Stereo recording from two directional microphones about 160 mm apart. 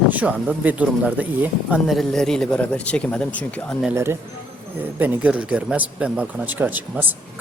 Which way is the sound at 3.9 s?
15° right (ahead or behind).